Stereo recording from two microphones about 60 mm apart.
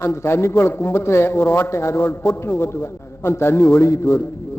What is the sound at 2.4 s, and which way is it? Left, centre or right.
A man's voice, left.